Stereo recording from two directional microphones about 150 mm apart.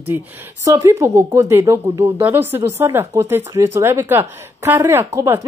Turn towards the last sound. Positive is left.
turn(degrees=-20)  # may be behind; listen again after turning